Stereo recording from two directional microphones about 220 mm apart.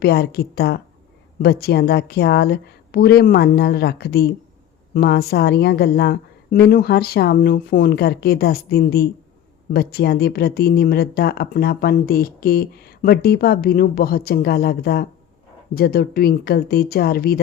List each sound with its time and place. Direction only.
0.0 s speech: 45° left (ahead or behind)